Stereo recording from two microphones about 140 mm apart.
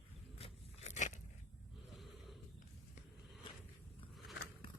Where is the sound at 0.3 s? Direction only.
45° left (ahead or behind).